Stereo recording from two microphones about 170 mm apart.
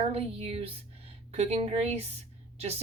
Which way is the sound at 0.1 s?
35° right (ahead or behind).